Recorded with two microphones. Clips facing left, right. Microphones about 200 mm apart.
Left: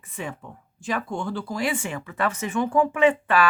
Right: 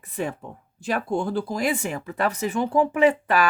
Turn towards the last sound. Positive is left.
turn(degrees=-40)  # may be behind; listen again after turning